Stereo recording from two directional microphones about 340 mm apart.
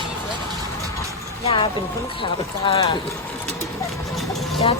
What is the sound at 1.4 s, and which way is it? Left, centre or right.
Speech, centre.